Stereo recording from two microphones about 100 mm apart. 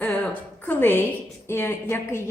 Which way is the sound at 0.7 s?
20° left (ahead or behind).